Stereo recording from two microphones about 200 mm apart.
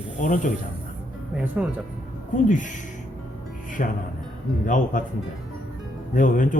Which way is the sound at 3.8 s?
40° left (ahead or behind).